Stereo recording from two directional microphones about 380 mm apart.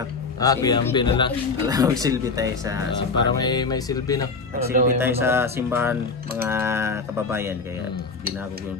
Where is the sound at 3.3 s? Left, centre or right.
Centre.